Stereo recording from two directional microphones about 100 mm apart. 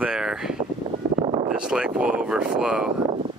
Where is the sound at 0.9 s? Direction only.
45° right (ahead or behind).